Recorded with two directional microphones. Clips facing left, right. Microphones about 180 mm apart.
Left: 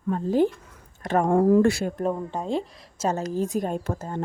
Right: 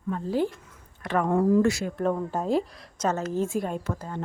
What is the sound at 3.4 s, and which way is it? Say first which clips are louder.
Speech: left 2 dB; 40° left (ahead or behind).